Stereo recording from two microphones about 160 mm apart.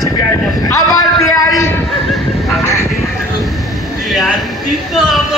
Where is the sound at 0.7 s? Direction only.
20° left (ahead or behind).